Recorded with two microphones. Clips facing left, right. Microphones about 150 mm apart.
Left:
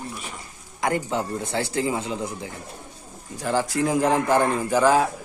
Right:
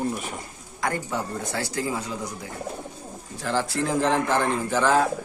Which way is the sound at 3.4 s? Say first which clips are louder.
Left 3 dB; 15° left (ahead or behind).